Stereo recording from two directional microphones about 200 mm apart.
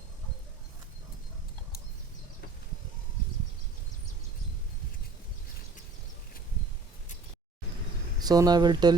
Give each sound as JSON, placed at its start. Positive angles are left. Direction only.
{"t": 8.2, "sound": "speech", "side_deg": -20}